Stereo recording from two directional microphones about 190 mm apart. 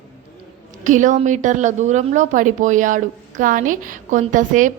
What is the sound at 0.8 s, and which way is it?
A woman's voice, 40° right (ahead or behind).